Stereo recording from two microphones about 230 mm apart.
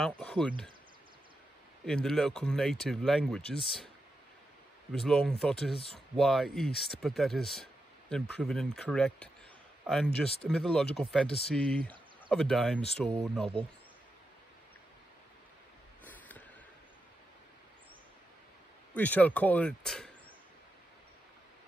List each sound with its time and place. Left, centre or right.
0.2 s speech: centre
1.9 s speech: centre
4.9 s speech: centre
16.0 s a sound: centre
18.9 s speech: centre